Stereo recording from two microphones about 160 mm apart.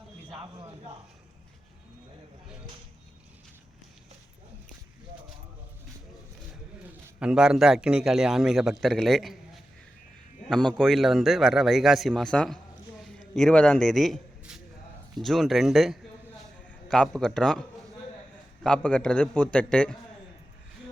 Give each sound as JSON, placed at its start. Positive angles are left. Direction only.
{"t": 0.3, "sound": "speech", "side_deg": -30}
{"t": 7.2, "sound": "a man's voice", "side_deg": -5}
{"t": 10.5, "sound": "a man's voice", "side_deg": 5}
{"t": 13.0, "sound": "a sound", "side_deg": 0}
{"t": 15.2, "sound": "a man's voice", "side_deg": 0}